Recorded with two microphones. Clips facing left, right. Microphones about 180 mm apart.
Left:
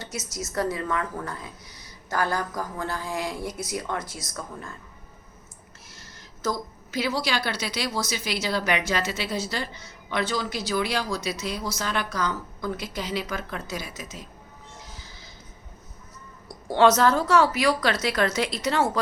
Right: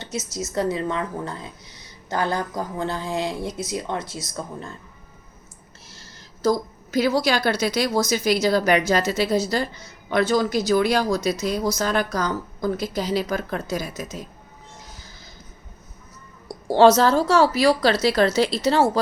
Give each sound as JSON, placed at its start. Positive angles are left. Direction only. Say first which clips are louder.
{"t": 0.0, "sound": "speech", "louder": "right 5 dB", "side_deg": -25}
{"t": 5.9, "sound": "a woman's voice", "louder": "right 2 dB", "side_deg": -30}
{"t": 16.6, "sound": "a woman's voice", "louder": "right 4 dB", "side_deg": -35}